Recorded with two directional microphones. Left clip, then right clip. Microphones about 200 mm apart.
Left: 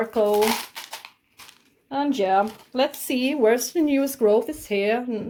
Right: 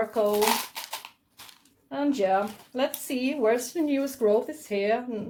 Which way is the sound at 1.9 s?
40° left (ahead or behind).